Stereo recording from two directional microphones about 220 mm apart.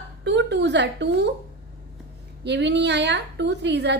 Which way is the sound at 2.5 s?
50° right (ahead or behind).